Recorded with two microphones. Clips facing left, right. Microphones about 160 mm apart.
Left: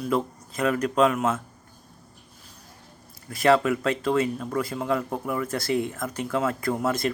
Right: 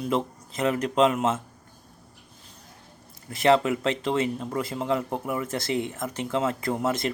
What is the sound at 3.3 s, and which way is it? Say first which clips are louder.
Speech: even; 20° right (ahead or behind).